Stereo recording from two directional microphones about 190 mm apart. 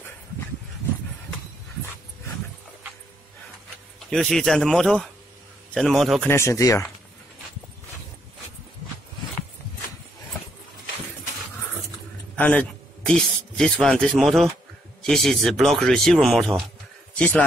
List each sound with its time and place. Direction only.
4.1 s speech: centre (ahead or behind)
6.2 s speech: 15° left (ahead or behind)
12.4 s a man's voice: 10° left (ahead or behind)